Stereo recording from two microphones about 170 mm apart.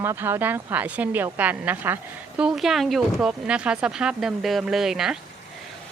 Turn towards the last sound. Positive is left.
turn(degrees=-5)  # may be behind; listen again after turning